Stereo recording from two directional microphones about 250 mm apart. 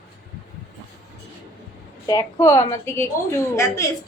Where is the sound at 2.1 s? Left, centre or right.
Centre.